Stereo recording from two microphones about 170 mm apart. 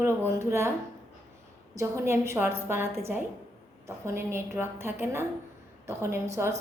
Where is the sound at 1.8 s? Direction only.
15° right (ahead or behind).